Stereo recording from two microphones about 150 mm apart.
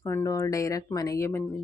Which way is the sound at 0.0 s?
20° left (ahead or behind).